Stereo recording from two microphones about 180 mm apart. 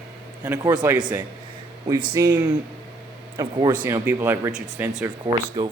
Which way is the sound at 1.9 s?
20° right (ahead or behind).